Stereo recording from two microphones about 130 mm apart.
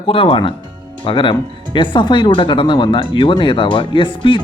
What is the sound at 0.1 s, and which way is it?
Speech, 45° left (ahead or behind).